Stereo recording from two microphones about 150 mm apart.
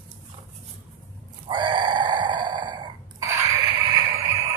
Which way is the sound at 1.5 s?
30° right (ahead or behind).